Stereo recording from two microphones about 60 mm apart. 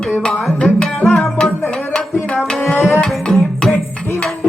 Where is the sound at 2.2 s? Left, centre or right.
Centre.